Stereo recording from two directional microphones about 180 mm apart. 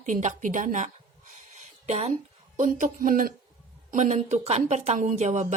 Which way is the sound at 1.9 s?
35° right (ahead or behind).